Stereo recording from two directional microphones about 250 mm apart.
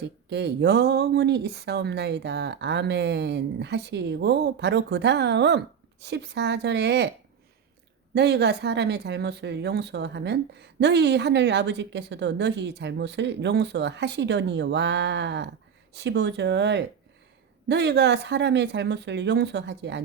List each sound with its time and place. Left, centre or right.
0.3 s speech: right
8.1 s speech: right